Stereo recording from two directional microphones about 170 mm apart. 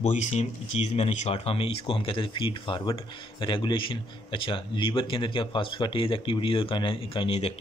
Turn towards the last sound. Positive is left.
turn(degrees=35)  # may be behind; listen again after turning